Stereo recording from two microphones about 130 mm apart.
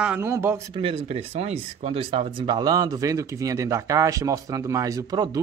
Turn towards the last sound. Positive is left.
turn(degrees=-30)  # may be behind; listen again after turning